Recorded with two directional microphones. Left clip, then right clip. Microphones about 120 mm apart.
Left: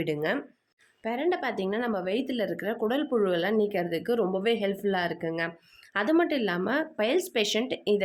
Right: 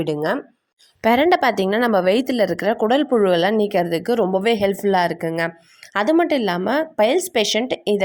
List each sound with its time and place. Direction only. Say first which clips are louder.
0.0 s speech: right 7 dB; 50° right (ahead or behind)
1.0 s a woman's voice: right 13 dB; 90° right
5.9 s speech: right 8 dB; 60° right (ahead or behind)